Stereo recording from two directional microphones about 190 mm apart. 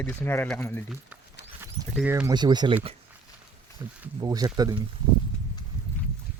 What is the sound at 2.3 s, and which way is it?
Speech, 20° right (ahead or behind).